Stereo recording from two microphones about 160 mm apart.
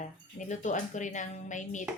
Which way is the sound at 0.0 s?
50° left (ahead or behind).